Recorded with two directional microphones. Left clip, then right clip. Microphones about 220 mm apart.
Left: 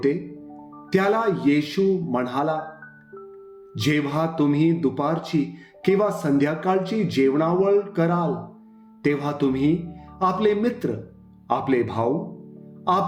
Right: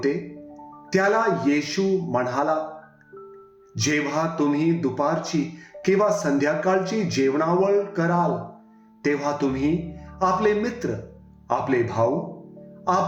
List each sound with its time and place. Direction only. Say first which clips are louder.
0.9 s speech: right 1 dB; 45° left (ahead or behind)
3.8 s speech: even; 45° left (ahead or behind)